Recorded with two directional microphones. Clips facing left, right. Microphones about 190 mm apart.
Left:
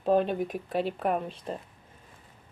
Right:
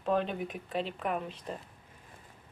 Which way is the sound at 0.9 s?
45° left (ahead or behind).